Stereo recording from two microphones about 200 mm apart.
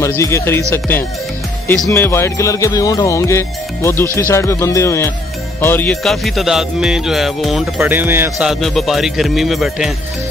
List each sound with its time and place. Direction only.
0.0 s speech: 15° left (ahead or behind)
1.9 s speech: 10° left (ahead or behind)
5.6 s music: 10° left (ahead or behind)